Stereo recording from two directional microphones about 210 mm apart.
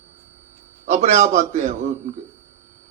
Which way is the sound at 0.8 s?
35° right (ahead or behind).